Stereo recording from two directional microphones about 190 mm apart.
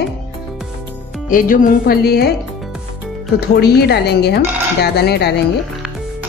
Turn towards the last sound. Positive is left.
turn(degrees=60)  # may be behind; listen again after turning